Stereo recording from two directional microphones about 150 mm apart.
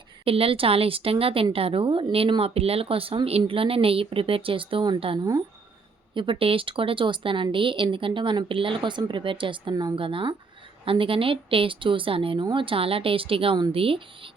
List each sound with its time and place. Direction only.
0.3 s speech: 40° right (ahead or behind)